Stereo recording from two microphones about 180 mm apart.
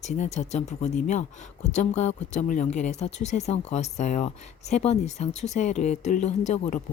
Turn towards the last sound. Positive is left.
turn(degrees=40)  # may be behind; listen again after turning